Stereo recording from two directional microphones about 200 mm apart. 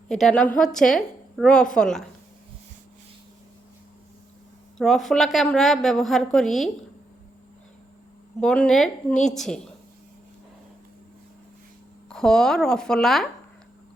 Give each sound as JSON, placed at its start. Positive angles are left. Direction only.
{"t": 0.1, "sound": "a woman's voice", "side_deg": 0}
{"t": 4.8, "sound": "a woman's voice", "side_deg": 0}
{"t": 8.4, "sound": "a woman's voice", "side_deg": 5}
{"t": 12.0, "sound": "a woman's voice", "side_deg": 5}